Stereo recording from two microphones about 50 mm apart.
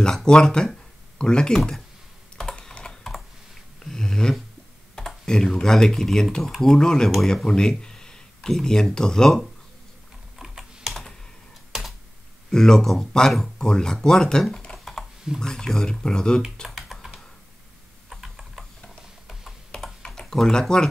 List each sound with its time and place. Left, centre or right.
0.0 s speech: centre
2.3 s typing: centre
3.8 s a sound: centre
4.9 s speech: centre
10.4 s typing: centre
10.8 s computer keyboard: centre
12.4 s speech: centre
14.5 s computer keyboard: centre
15.4 s speech: centre
16.6 s typing: centre
20.1 s speech: centre